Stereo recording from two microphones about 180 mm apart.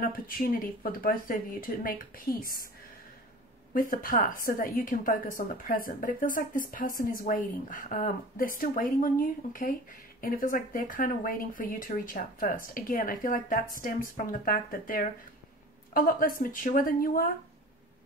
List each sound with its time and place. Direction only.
0.8 s a woman's voice: 50° left (ahead or behind)
3.7 s a woman's voice: 50° left (ahead or behind)